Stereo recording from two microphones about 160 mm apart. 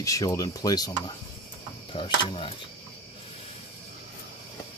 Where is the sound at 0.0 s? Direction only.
20° left (ahead or behind).